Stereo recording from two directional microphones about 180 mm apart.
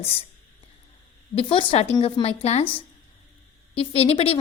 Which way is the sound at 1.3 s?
30° left (ahead or behind).